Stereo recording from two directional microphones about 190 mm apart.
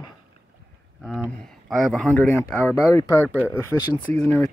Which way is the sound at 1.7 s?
Centre (ahead or behind).